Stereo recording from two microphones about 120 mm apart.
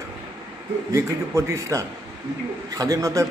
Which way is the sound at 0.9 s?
25° right (ahead or behind).